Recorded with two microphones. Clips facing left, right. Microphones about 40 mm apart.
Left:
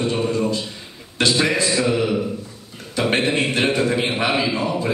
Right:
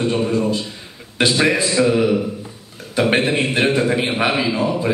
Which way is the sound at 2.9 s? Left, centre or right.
Centre.